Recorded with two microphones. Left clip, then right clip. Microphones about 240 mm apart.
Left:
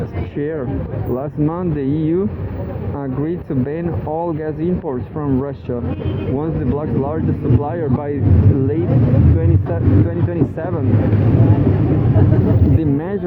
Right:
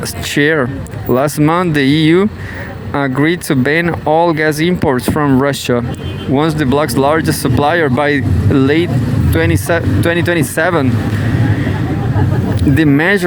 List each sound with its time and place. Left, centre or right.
0.3 s speech: right
12.8 s speech: right